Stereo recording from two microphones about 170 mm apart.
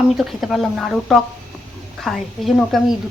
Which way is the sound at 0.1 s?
Centre (ahead or behind).